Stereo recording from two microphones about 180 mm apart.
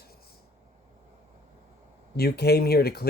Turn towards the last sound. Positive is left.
turn(degrees=60)  # may be behind; listen again after turning